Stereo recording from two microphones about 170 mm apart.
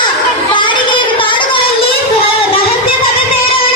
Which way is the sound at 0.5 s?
30° left (ahead or behind).